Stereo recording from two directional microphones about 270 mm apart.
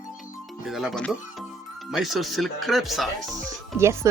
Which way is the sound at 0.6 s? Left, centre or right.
Centre.